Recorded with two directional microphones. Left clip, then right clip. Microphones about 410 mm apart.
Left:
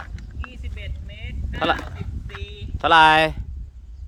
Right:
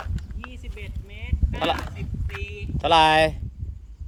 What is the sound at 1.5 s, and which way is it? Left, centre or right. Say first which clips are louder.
Speech: left 3 dB; centre.